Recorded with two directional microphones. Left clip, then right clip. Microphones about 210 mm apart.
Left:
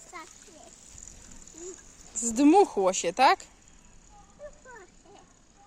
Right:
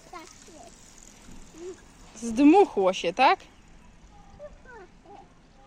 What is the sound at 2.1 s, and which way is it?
Speech, 25° left (ahead or behind).